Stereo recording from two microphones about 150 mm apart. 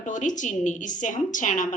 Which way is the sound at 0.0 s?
55° left (ahead or behind).